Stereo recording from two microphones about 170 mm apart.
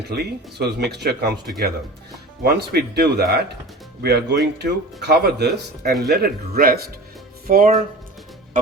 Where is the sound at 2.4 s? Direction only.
75° right (ahead or behind).